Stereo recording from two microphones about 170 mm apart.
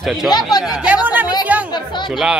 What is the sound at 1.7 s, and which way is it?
Speech, 25° left (ahead or behind).